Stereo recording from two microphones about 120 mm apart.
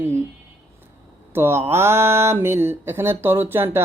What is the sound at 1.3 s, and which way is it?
Speech, 20° right (ahead or behind).